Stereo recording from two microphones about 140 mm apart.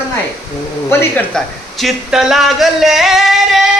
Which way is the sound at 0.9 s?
15° left (ahead or behind).